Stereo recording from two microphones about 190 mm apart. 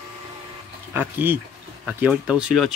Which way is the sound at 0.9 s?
10° right (ahead or behind).